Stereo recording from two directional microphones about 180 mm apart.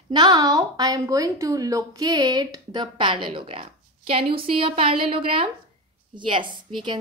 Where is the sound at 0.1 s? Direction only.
20° right (ahead or behind).